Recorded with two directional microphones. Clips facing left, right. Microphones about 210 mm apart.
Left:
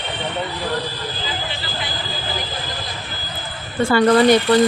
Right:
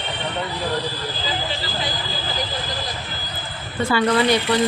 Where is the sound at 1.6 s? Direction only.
40° right (ahead or behind).